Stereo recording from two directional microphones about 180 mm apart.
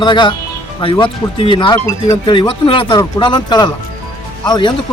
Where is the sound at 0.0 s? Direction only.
25° left (ahead or behind).